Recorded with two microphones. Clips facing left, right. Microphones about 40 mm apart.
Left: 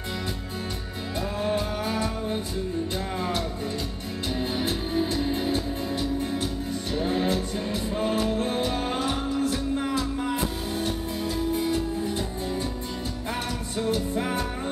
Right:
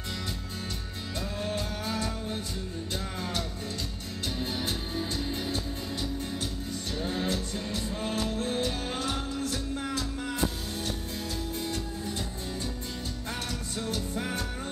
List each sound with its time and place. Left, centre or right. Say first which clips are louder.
1.4 s music: left 7 dB; left
14.1 s music: left 6 dB; centre